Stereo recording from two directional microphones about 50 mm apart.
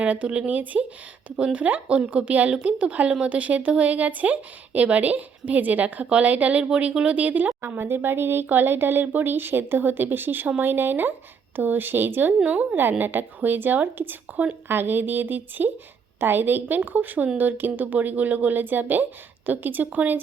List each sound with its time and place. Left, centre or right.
0.0 s speech: right
7.8 s a woman's voice: right